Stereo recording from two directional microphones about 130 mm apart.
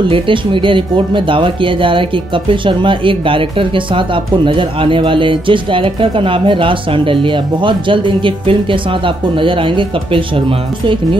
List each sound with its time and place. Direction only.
0.1 s speech: 40° right (ahead or behind)